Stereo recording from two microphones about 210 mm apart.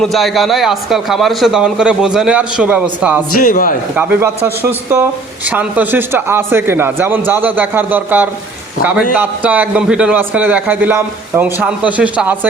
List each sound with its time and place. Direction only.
0.0 s a man's voice: centre (ahead or behind)
3.3 s a man's voice: 40° left (ahead or behind)
3.9 s a man's voice: 10° right (ahead or behind)